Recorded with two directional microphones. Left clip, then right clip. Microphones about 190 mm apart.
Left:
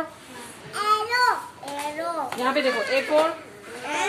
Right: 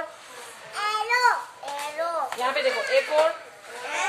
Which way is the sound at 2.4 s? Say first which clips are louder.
Left 2 dB; 35° left (ahead or behind).